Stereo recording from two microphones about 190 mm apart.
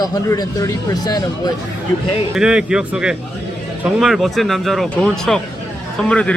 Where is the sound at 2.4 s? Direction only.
5° right (ahead or behind).